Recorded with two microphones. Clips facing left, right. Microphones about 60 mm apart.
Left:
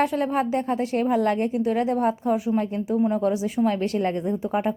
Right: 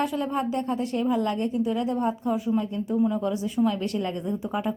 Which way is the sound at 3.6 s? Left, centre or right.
Left.